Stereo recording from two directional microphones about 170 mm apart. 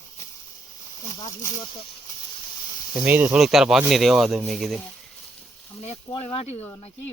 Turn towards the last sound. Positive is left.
turn(degrees=35)  # may be behind; listen again after turning